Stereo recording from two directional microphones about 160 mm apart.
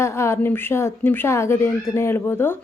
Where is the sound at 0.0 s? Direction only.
15° left (ahead or behind).